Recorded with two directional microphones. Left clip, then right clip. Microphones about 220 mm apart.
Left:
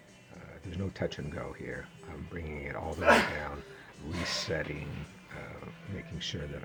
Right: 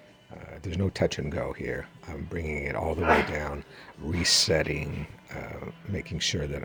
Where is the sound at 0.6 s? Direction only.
35° right (ahead or behind).